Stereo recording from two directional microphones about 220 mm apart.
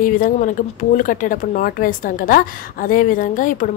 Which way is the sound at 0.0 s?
40° left (ahead or behind).